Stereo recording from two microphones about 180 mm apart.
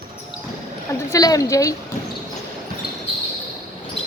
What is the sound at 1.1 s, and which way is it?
Speech, 20° left (ahead or behind).